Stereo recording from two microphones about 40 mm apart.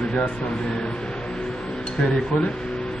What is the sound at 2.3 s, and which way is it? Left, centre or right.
Speech, left.